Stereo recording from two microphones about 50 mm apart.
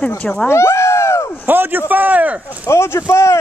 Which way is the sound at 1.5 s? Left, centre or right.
Right.